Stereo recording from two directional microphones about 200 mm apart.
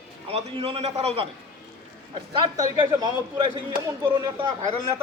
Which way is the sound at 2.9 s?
20° right (ahead or behind).